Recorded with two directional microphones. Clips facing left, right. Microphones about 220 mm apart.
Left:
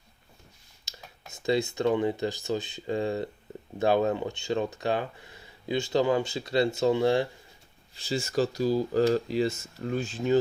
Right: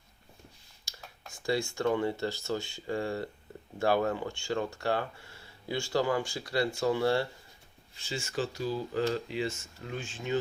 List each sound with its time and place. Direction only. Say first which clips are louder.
0.9 s a sound: left 4 dB; 20° left (ahead or behind)
1.3 s speech: left 4 dB; 20° left (ahead or behind)
7.9 s speech: left 7 dB; 35° left (ahead or behind)